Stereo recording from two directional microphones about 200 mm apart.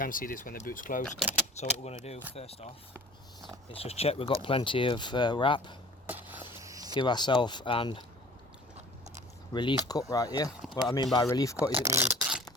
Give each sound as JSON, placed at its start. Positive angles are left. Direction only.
{"t": 0.0, "sound": "speech", "side_deg": 45}
{"t": 1.5, "sound": "speech", "side_deg": 30}
{"t": 3.8, "sound": "speech", "side_deg": 30}
{"t": 6.1, "sound": "a sound", "side_deg": -10}
{"t": 6.9, "sound": "speech", "side_deg": 20}
{"t": 9.5, "sound": "speech", "side_deg": 25}
{"t": 10.6, "sound": "speech", "side_deg": 0}
{"t": 10.9, "sound": "speech", "side_deg": 20}
{"t": 11.7, "sound": "speech", "side_deg": -15}